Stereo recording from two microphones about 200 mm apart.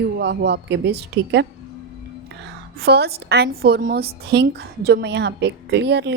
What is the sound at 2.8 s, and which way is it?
A woman's voice, 55° right (ahead or behind).